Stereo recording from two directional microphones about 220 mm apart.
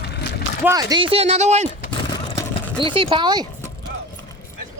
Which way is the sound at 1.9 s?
20° left (ahead or behind).